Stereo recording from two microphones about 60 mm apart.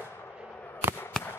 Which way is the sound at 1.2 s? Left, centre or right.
Centre.